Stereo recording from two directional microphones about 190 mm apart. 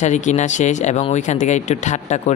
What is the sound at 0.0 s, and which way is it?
Speech, 40° left (ahead or behind).